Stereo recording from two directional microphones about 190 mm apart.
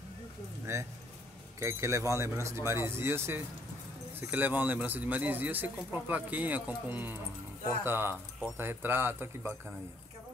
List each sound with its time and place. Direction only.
0.7 s speech: 15° right (ahead or behind)